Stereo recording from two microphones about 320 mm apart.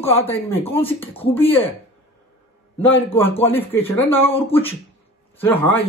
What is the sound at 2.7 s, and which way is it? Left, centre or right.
Speech, centre.